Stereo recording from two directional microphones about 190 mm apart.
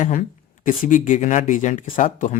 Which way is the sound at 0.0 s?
40° left (ahead or behind).